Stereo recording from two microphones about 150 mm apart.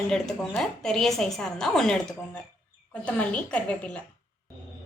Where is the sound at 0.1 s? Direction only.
5° left (ahead or behind).